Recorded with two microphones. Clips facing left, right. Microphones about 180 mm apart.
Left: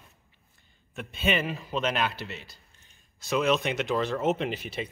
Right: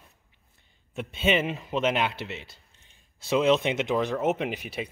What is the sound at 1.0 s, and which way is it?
A man's voice, 20° right (ahead or behind).